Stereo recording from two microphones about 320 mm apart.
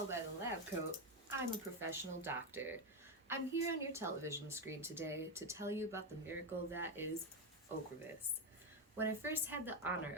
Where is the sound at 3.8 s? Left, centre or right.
Centre.